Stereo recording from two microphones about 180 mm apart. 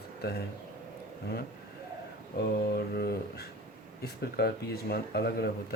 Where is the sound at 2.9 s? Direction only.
65° left (ahead or behind).